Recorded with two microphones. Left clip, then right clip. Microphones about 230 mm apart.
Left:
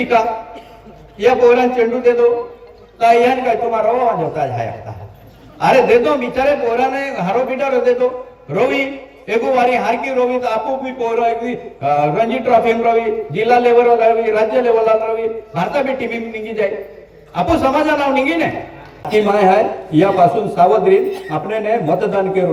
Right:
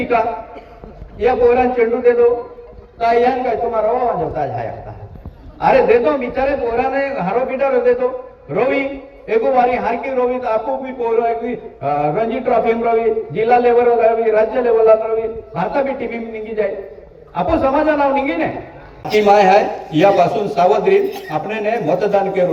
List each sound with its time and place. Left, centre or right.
0.0 s a man's voice: left